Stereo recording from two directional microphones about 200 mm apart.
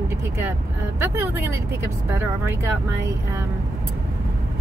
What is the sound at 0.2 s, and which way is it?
Speech, 10° right (ahead or behind).